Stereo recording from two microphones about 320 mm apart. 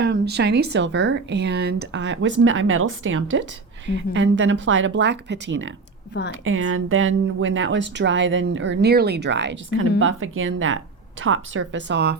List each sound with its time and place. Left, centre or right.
0.0 s speech: right